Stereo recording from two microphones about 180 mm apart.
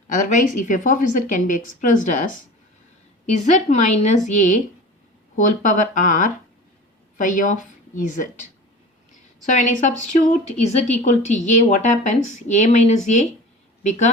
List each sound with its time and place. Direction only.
0.1 s a woman's voice: 45° left (ahead or behind)
9.5 s speech: 45° left (ahead or behind)